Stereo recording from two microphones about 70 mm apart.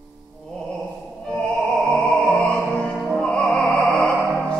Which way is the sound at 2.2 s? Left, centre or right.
Centre.